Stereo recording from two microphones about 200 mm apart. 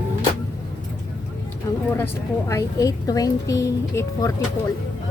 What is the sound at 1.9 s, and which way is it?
A woman's voice, 10° left (ahead or behind).